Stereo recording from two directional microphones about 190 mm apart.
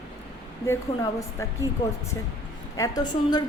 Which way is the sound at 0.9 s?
20° left (ahead or behind).